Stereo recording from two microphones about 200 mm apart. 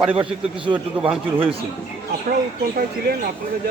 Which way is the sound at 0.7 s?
5° right (ahead or behind).